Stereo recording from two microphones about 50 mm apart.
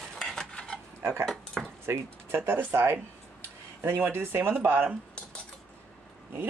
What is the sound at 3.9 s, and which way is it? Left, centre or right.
Speech, right.